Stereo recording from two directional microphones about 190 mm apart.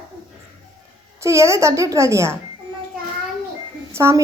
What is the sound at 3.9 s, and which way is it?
Speech, 15° right (ahead or behind).